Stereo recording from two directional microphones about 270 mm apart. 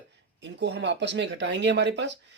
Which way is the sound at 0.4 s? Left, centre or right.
Right.